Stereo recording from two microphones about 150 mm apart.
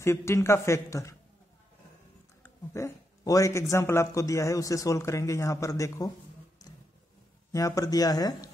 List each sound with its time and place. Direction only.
0.0 s a man's voice: 20° left (ahead or behind)
2.7 s a man's voice: 20° left (ahead or behind)
7.5 s a man's voice: 20° left (ahead or behind)